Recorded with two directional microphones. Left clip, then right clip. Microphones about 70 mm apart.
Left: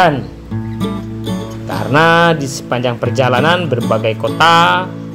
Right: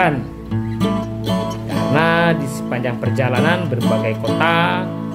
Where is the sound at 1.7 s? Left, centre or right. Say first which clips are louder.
Left 6 dB; left.